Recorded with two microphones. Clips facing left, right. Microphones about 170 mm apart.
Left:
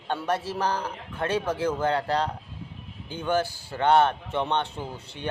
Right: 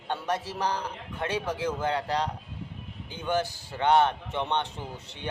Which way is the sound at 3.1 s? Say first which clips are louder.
Left 3 dB; 20° right (ahead or behind).